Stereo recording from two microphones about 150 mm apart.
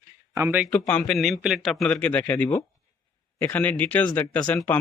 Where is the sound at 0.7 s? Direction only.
10° left (ahead or behind).